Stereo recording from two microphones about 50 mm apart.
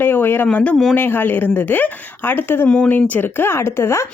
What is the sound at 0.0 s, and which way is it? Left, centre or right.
Speech, left.